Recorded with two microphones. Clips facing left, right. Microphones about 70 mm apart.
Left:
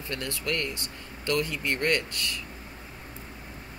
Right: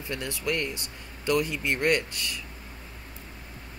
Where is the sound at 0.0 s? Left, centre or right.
Centre.